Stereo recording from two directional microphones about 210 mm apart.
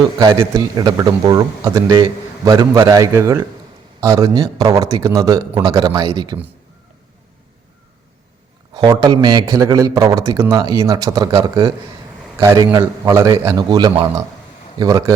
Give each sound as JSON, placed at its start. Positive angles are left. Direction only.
{"t": 0.2, "sound": "a man's voice", "side_deg": -20}
{"t": 8.7, "sound": "a man's voice", "side_deg": -20}